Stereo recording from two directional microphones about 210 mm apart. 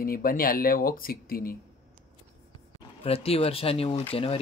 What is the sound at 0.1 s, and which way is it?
Speech, 45° left (ahead or behind).